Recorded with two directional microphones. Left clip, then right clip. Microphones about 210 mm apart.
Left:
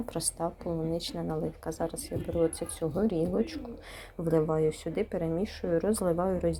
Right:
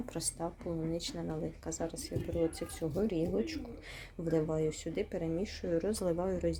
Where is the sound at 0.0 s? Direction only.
Centre (ahead or behind).